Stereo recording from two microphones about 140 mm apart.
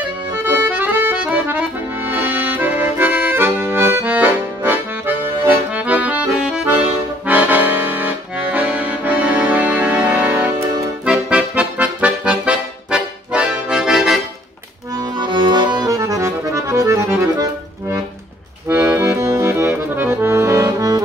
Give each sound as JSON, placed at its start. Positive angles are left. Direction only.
{"t": 0.5, "sound": "accordion", "side_deg": -15}
{"t": 15.0, "sound": "accordion", "side_deg": -30}